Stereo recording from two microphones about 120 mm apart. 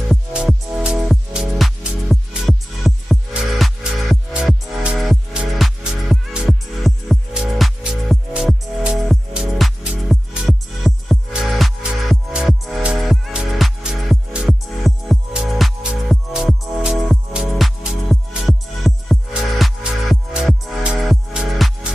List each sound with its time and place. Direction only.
0.1 s music: 5° right (ahead or behind)